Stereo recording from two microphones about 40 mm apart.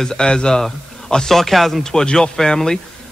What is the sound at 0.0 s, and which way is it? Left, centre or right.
A man's voice, centre.